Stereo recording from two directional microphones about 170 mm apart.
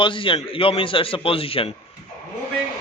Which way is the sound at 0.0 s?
30° left (ahead or behind).